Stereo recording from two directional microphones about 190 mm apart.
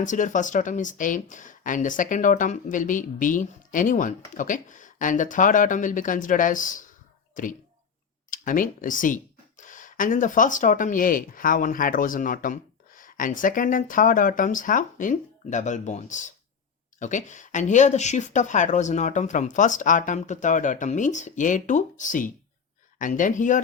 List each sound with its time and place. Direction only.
0.0 s speech: 40° left (ahead or behind)